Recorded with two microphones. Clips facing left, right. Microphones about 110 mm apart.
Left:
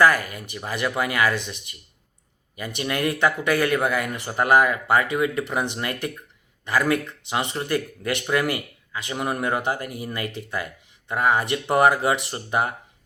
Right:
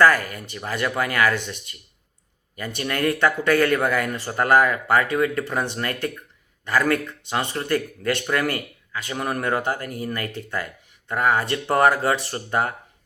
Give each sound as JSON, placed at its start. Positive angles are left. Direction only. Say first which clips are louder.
{"t": 0.0, "sound": "speech", "louder": "right 1 dB", "side_deg": 15}